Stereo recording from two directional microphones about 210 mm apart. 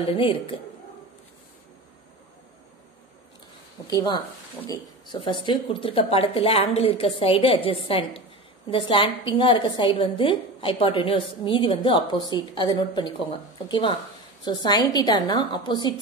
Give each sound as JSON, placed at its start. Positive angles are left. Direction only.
{"t": 0.0, "sound": "a woman's voice", "side_deg": 25}
{"t": 3.8, "sound": "a woman's voice", "side_deg": 20}